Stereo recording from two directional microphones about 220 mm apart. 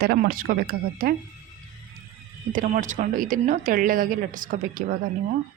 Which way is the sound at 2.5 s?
35° right (ahead or behind).